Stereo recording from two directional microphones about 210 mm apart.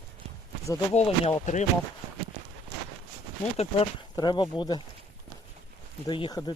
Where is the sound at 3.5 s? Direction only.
30° left (ahead or behind).